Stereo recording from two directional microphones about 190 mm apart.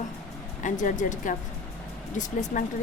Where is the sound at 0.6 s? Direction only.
40° left (ahead or behind).